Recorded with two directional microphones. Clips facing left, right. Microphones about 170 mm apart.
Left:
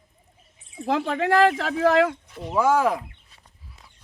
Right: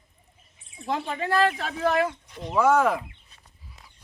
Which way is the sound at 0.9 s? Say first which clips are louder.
Left 5 dB; 70° left (ahead or behind).